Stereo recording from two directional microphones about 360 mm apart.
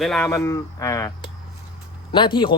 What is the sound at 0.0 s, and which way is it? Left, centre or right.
A man's voice, centre.